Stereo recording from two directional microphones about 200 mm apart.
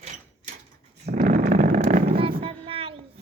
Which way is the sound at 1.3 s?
40° right (ahead or behind).